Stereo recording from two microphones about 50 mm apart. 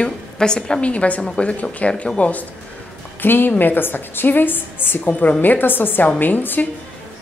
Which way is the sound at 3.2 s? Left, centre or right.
Left.